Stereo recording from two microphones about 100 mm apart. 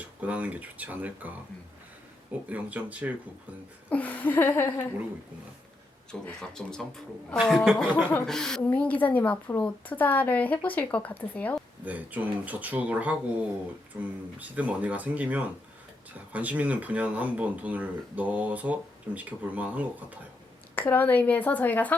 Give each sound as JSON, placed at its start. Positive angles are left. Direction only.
{"t": 0.0, "sound": "speech", "side_deg": -15}
{"t": 2.5, "sound": "speech", "side_deg": -15}
{"t": 3.8, "sound": "a woman's voice", "side_deg": 15}
{"t": 6.1, "sound": "a woman's voice", "side_deg": 5}
{"t": 8.6, "sound": "a woman's voice", "side_deg": 15}
{"t": 11.9, "sound": "speech", "side_deg": -15}
{"t": 20.7, "sound": "a woman's voice", "side_deg": 20}